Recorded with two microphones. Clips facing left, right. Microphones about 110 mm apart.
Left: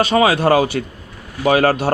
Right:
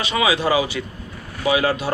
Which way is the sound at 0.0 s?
45° left (ahead or behind).